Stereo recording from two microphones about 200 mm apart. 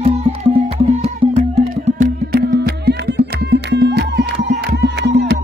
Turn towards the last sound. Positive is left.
turn(degrees=-55)  # may be behind; listen again after turning